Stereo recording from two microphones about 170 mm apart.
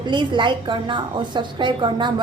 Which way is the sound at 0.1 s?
25° right (ahead or behind).